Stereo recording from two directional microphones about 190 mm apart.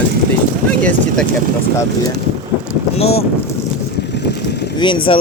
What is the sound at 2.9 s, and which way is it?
Speech, 30° left (ahead or behind).